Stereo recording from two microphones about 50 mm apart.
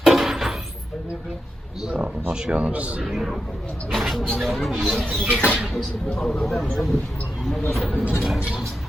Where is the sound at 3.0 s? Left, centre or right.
Centre.